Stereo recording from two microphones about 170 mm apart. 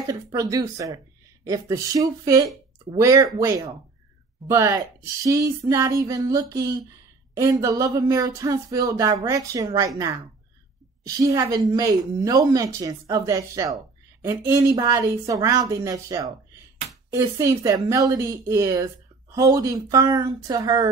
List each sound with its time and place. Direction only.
0.1 s speech: 20° right (ahead or behind)